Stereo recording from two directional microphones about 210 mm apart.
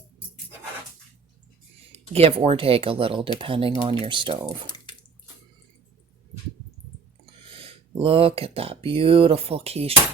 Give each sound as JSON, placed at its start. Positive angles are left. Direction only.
{"t": 2.1, "sound": "speech", "side_deg": -30}
{"t": 7.4, "sound": "speech", "side_deg": -25}